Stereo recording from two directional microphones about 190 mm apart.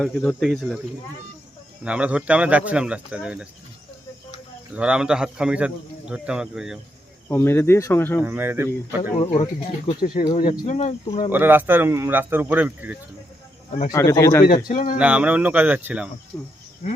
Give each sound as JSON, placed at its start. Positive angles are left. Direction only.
{"t": 0.0, "sound": "a man's voice", "side_deg": 0}
{"t": 1.8, "sound": "speech", "side_deg": -5}
{"t": 4.7, "sound": "a man's voice", "side_deg": -5}
{"t": 7.3, "sound": "speech", "side_deg": 10}
{"t": 8.2, "sound": "speech", "side_deg": -10}
{"t": 9.1, "sound": "speech", "side_deg": 25}
{"t": 11.3, "sound": "speech", "side_deg": -10}
{"t": 13.9, "sound": "speech", "side_deg": 15}
{"t": 14.7, "sound": "speech", "side_deg": 45}
{"t": 14.9, "sound": "speech", "side_deg": -5}